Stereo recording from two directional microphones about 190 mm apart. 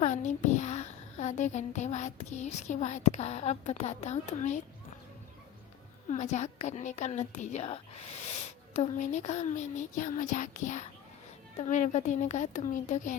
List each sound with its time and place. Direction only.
0.0 s a child's voice: 40° left (ahead or behind)
6.1 s a child's voice: 40° left (ahead or behind)